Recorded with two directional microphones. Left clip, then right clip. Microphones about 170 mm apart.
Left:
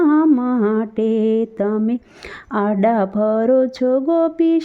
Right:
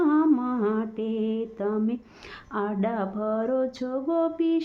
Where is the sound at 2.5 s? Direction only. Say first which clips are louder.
Left 11 dB; 40° left (ahead or behind).